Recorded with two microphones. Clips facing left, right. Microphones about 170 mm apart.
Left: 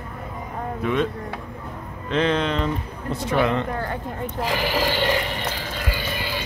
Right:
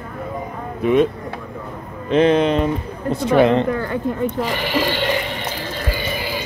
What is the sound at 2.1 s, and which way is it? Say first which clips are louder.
Speech: right 7 dB; 15° right (ahead or behind).